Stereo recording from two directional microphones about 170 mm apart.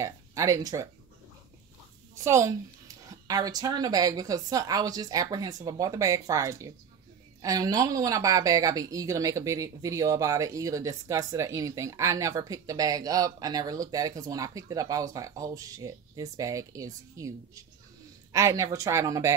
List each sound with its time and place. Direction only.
0.0 s speech: 20° right (ahead or behind)
2.2 s a woman's voice: 15° right (ahead or behind)